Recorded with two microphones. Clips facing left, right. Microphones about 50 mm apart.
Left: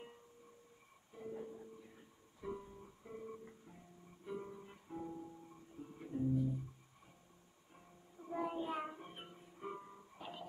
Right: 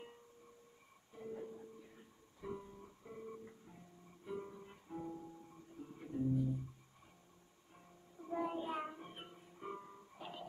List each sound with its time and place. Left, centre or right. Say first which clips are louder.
1.1 s music: even; centre
7.7 s music: right 1 dB; centre